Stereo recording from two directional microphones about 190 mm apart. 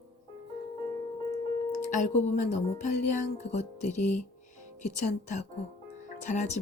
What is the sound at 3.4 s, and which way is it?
Speech, 35° left (ahead or behind).